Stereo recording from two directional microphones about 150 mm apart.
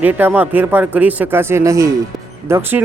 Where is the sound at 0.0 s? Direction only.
10° right (ahead or behind).